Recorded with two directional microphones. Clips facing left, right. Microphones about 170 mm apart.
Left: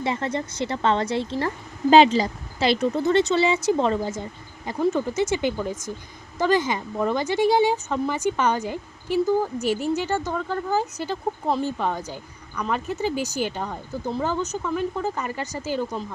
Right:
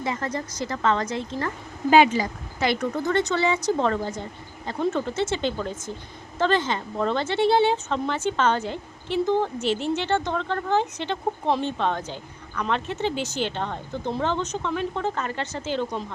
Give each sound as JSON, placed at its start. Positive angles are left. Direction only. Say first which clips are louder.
{"t": 0.0, "sound": "speech", "louder": "left 2 dB", "side_deg": 25}